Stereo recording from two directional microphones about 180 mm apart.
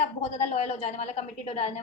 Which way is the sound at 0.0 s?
35° left (ahead or behind).